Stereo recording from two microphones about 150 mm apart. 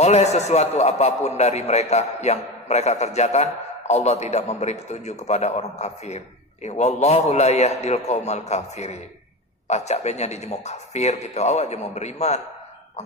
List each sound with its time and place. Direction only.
0.0 s a man's voice: 50° left (ahead or behind)